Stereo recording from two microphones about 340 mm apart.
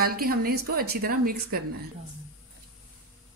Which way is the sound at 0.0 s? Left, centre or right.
Right.